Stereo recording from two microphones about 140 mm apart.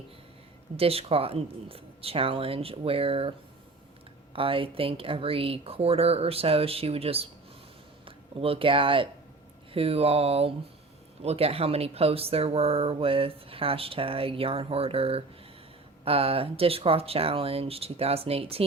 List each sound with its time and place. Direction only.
0.8 s speech: 45° right (ahead or behind)
4.4 s speech: 40° right (ahead or behind)